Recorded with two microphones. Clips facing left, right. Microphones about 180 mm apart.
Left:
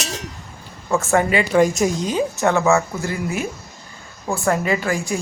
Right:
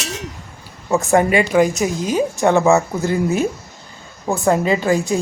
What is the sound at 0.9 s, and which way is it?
Speech, 15° right (ahead or behind).